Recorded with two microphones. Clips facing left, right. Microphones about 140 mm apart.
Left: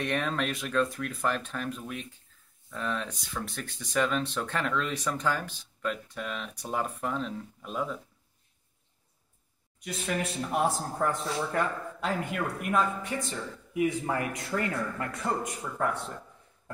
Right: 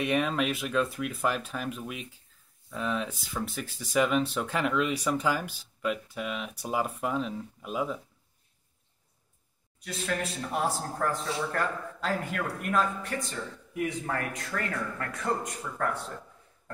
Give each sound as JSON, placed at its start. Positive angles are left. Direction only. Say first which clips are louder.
{"t": 0.0, "sound": "speech", "louder": "right 3 dB", "side_deg": -5}
{"t": 9.8, "sound": "speech", "louder": "even", "side_deg": 5}
{"t": 14.0, "sound": "speech", "louder": "left 2 dB", "side_deg": 15}